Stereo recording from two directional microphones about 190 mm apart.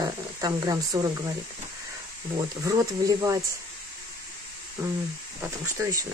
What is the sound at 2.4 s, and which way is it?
Speech, 20° right (ahead or behind).